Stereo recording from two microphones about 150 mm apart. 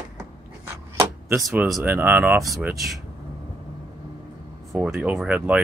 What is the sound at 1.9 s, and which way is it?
Speech, 10° right (ahead or behind).